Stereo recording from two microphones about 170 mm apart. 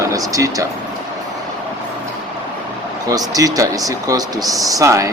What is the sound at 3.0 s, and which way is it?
Speech, 20° right (ahead or behind).